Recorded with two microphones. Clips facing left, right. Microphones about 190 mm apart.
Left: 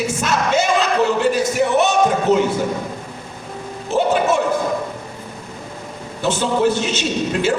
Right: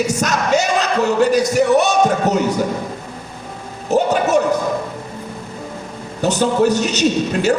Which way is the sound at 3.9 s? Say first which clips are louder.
Right 3 dB; 40° right (ahead or behind).